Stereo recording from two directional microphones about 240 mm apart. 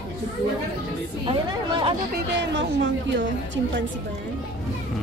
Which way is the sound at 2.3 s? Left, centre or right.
Right.